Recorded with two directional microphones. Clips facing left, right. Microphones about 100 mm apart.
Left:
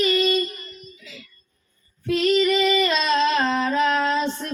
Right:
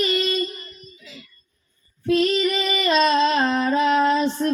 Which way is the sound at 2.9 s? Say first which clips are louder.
Right 3 dB; 35° right (ahead or behind).